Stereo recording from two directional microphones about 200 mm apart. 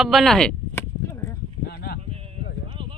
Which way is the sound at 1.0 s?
15° left (ahead or behind).